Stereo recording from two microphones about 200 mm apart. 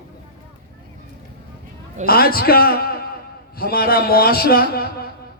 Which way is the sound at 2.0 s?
50° left (ahead or behind).